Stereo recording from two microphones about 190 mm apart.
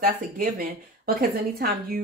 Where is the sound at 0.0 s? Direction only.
50° right (ahead or behind).